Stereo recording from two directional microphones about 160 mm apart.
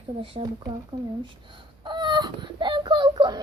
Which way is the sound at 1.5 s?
30° right (ahead or behind).